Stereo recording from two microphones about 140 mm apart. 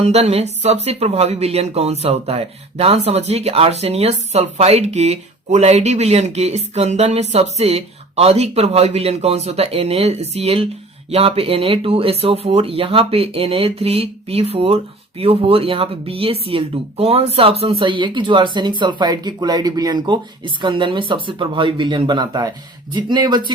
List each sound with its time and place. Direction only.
0.0 s speech: 50° right (ahead or behind); by 23.5 s 30° right (ahead or behind)